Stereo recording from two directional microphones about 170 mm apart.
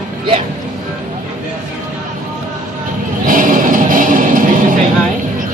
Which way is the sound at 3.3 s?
50° right (ahead or behind).